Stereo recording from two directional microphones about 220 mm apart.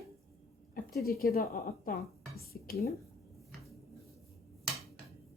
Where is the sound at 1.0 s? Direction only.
45° left (ahead or behind).